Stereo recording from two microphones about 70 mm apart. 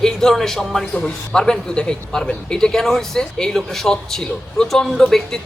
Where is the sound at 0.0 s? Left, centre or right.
Centre.